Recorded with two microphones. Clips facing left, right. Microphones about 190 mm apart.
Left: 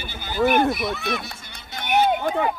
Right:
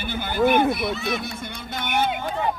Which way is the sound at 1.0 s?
60° left (ahead or behind).